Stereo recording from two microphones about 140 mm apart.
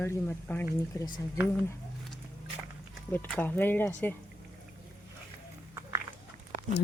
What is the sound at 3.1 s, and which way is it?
Speech, 15° left (ahead or behind).